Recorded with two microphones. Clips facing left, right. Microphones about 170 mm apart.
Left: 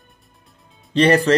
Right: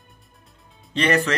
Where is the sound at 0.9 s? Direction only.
35° left (ahead or behind).